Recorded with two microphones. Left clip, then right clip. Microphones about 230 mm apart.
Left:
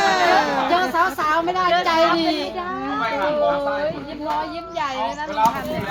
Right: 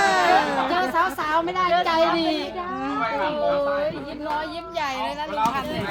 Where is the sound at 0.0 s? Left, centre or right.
Centre.